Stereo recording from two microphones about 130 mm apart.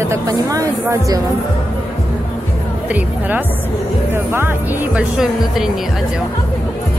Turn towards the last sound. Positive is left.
turn(degrees=-5)  # may be behind; listen again after turning